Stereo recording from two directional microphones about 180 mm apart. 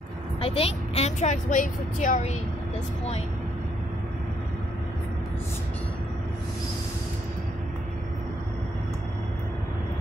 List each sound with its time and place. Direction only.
0.4 s a woman's voice: 35° left (ahead or behind)